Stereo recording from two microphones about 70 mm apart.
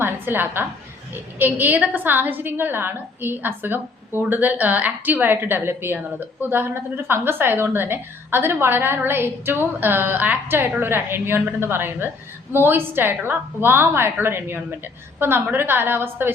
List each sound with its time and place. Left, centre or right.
0.0 s a woman's voice: right